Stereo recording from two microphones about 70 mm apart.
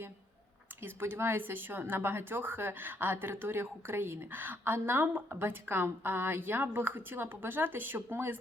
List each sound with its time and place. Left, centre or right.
0.8 s speech: right